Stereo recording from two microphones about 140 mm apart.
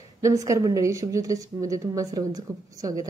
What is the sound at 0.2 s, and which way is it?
Speech, 25° right (ahead or behind).